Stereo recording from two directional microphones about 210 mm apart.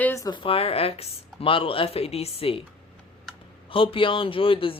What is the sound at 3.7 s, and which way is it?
Speech, 25° left (ahead or behind).